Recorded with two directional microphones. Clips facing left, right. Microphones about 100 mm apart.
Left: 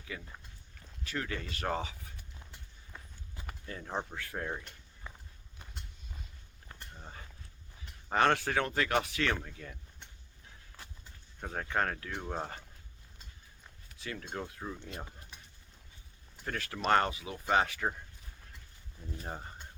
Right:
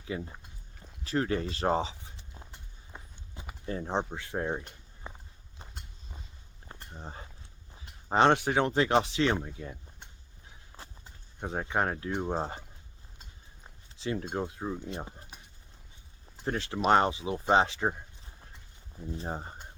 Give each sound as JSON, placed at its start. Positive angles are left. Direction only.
{"t": 0.0, "sound": "speech", "side_deg": -25}
{"t": 0.8, "sound": "walk", "side_deg": -35}
{"t": 3.7, "sound": "speech", "side_deg": -30}
{"t": 6.7, "sound": "a sound", "side_deg": -30}
{"t": 7.7, "sound": "speech", "side_deg": -25}
{"t": 10.8, "sound": "walk", "side_deg": -30}
{"t": 11.3, "sound": "speech", "side_deg": -20}
{"t": 13.7, "sound": "speech", "side_deg": -25}
{"t": 16.4, "sound": "speech", "side_deg": -25}